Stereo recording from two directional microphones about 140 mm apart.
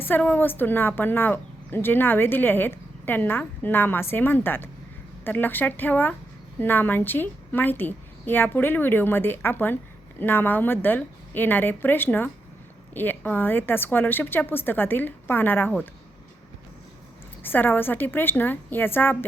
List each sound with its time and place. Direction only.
0.0 s speech: 15° left (ahead or behind)
17.4 s speech: 15° left (ahead or behind)